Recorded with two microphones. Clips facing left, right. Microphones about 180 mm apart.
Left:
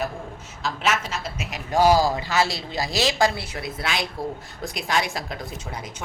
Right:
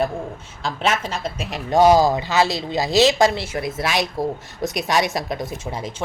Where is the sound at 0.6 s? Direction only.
30° right (ahead or behind).